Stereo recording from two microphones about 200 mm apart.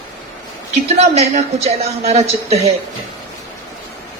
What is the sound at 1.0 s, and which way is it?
A woman's voice, 30° right (ahead or behind).